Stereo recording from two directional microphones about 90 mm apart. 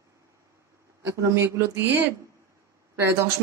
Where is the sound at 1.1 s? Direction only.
30° right (ahead or behind).